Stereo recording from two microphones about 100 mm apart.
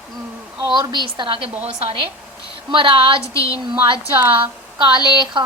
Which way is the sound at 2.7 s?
55° right (ahead or behind).